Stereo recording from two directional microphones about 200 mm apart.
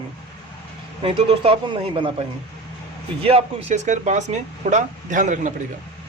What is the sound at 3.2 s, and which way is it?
Speech, 30° right (ahead or behind).